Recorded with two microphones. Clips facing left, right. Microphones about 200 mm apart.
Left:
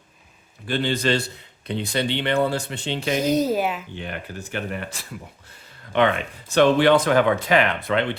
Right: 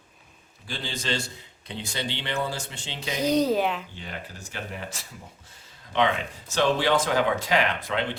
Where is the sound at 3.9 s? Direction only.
60° left (ahead or behind).